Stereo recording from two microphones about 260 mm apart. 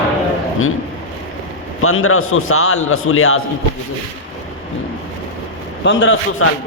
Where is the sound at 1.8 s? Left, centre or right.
Left.